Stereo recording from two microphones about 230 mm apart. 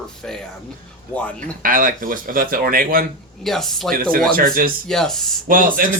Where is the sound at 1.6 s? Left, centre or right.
Right.